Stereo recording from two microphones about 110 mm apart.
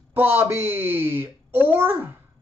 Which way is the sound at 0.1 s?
20° right (ahead or behind).